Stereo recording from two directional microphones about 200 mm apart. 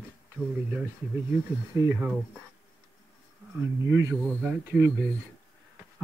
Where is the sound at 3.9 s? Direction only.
10° right (ahead or behind).